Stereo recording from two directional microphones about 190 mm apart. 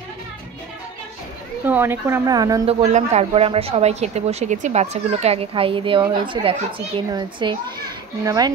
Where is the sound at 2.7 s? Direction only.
35° right (ahead or behind).